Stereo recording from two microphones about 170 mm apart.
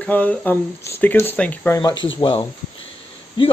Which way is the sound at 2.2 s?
30° left (ahead or behind).